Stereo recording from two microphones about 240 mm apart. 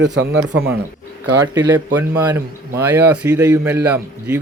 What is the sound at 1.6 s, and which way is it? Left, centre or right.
A man's voice, centre.